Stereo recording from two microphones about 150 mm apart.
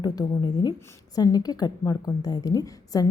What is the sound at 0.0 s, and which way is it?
A woman's voice, 25° left (ahead or behind).